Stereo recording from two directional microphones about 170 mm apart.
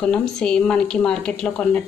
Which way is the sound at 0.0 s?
5° left (ahead or behind).